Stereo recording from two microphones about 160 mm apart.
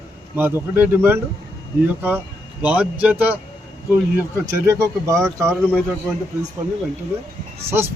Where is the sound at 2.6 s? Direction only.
10° right (ahead or behind).